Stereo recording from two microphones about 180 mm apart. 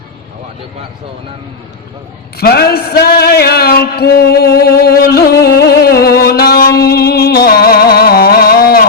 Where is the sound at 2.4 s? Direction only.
60° left (ahead or behind).